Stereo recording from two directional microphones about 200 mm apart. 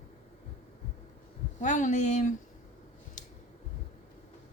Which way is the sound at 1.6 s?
40° left (ahead or behind).